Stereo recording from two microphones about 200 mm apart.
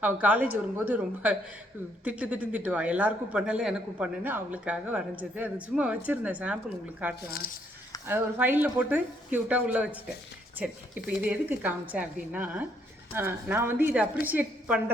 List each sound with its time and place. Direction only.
0.0 s a man's voice: 10° right (ahead or behind)
7.3 s speech: 45° left (ahead or behind)
8.0 s a man's voice: 10° right (ahead or behind)
11.2 s a man's voice: 10° right (ahead or behind)